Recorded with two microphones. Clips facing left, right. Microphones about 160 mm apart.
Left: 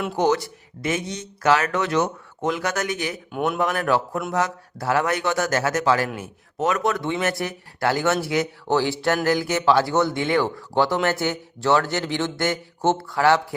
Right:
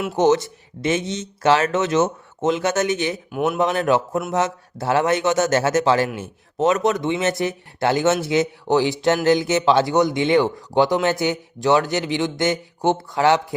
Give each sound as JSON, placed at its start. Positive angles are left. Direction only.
{"t": 0.2, "sound": "speech", "side_deg": -20}
{"t": 3.3, "sound": "speech", "side_deg": -5}
{"t": 3.6, "sound": "speech", "side_deg": -20}